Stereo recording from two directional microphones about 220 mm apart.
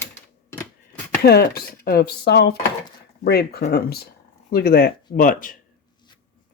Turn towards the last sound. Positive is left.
turn(degrees=40)  # may be behind; listen again after turning